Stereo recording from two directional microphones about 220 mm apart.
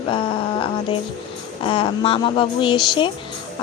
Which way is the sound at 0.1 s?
25° left (ahead or behind).